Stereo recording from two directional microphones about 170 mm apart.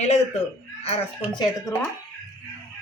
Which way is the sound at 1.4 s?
20° left (ahead or behind).